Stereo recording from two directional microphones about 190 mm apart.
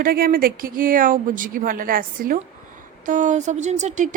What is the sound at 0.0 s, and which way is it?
A woman's voice, 50° right (ahead or behind).